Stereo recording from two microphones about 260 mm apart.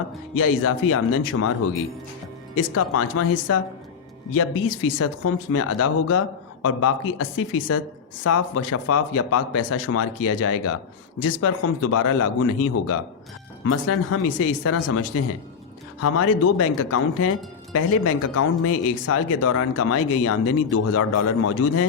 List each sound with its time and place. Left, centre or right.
0.3 s speech: left
2.6 s speech: left
4.9 s speech: left
8.2 s speech: left
16.0 s speech: left